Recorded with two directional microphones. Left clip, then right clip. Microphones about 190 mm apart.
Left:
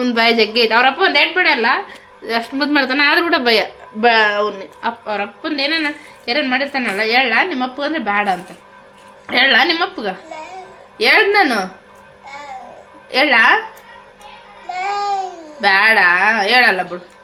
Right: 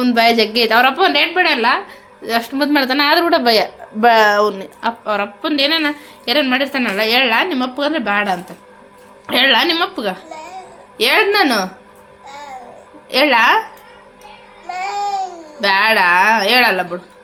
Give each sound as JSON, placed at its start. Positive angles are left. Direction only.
{"t": 0.0, "sound": "a woman's voice", "side_deg": -15}
{"t": 13.1, "sound": "a woman's voice", "side_deg": -15}
{"t": 14.7, "sound": "babbling", "side_deg": 0}
{"t": 15.6, "sound": "a woman's voice", "side_deg": -15}